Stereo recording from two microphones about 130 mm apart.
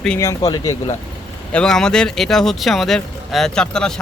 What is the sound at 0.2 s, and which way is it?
Speech, 25° left (ahead or behind).